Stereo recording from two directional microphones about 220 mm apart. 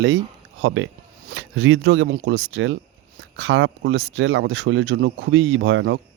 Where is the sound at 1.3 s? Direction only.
60° right (ahead or behind).